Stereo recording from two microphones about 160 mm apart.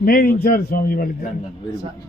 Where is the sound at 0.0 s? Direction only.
65° left (ahead or behind).